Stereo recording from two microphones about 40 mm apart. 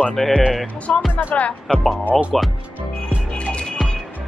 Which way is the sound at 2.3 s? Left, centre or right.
Centre.